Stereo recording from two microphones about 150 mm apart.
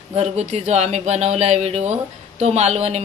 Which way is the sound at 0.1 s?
45° right (ahead or behind).